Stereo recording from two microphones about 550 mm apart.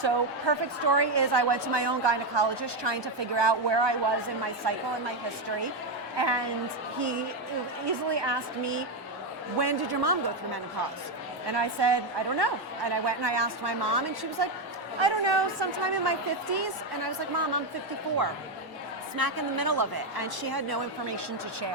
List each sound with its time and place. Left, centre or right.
0.0 s a woman's voice: right
6.1 s a woman's voice: right
7.9 s a woman's voice: right
19.1 s a woman's voice: right